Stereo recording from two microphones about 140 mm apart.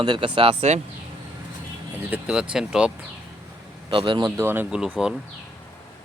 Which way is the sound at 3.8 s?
35° right (ahead or behind).